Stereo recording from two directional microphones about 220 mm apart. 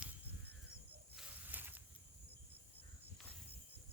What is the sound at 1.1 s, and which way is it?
Walk, 5° right (ahead or behind).